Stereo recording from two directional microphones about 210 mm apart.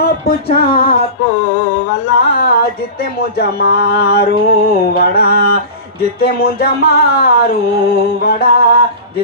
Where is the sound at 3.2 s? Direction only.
50° left (ahead or behind).